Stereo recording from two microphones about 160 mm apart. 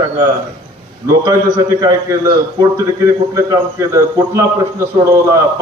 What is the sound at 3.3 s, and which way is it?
A man's voice, 20° right (ahead or behind).